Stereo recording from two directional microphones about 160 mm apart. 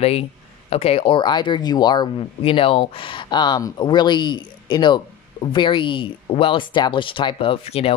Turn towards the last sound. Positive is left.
turn(degrees=40)  # may be behind; listen again after turning